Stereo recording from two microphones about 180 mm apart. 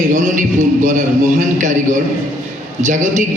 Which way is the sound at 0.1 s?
45° right (ahead or behind).